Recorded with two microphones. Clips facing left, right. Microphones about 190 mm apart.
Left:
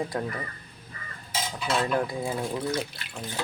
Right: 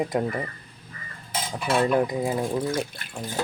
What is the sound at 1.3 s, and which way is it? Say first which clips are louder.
Cutlery: right 3 dB; 55° right (ahead or behind).